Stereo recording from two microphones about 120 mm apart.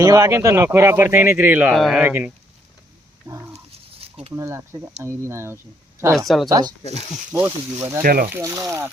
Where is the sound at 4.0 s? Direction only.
60° right (ahead or behind).